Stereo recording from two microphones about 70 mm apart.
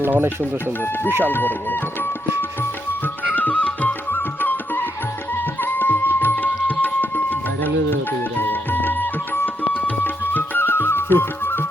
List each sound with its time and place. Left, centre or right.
0.0 s speech: right
1.2 s speech: left
3.3 s music: left